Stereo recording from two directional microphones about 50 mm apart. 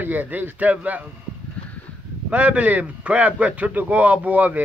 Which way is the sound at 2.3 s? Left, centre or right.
Right.